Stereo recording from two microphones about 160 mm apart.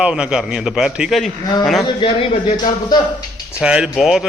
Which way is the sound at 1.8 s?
35° left (ahead or behind).